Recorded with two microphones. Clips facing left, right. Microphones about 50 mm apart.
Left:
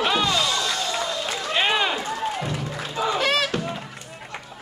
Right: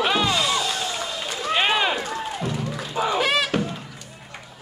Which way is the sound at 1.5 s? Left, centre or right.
Centre.